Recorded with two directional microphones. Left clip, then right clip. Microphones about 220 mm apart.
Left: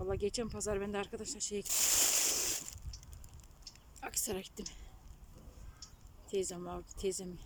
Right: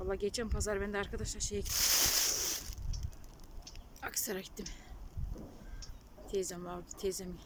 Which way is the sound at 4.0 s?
10° left (ahead or behind).